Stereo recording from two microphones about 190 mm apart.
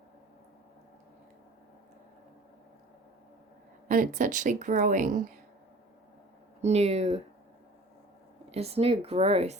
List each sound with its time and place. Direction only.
3.8 s a woman's voice: 45° right (ahead or behind)
6.6 s speech: 35° right (ahead or behind)
8.4 s speech: 35° right (ahead or behind)